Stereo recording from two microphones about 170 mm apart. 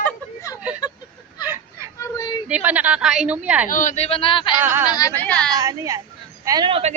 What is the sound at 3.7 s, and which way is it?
Speech, 50° left (ahead or behind).